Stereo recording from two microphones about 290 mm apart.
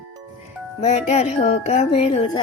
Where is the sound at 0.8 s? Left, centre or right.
Left.